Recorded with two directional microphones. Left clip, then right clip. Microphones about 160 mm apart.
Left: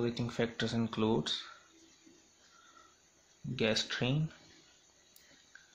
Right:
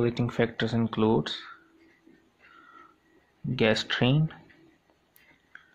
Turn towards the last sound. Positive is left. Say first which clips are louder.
# right 8 dB
turn(degrees=-15)  # may be behind; listen again after turning